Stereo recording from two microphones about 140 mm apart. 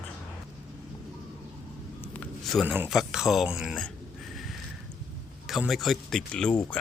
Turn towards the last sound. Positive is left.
turn(degrees=5)  # may be behind; listen again after turning